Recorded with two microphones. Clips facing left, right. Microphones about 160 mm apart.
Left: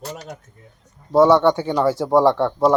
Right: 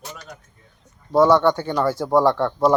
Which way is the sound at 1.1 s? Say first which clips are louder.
Left 2 dB; 5° left (ahead or behind).